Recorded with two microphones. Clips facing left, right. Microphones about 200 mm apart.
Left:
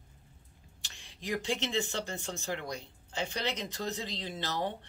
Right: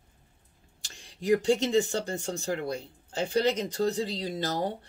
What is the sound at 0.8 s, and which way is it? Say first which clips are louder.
Speech: right 10 dB; 40° right (ahead or behind).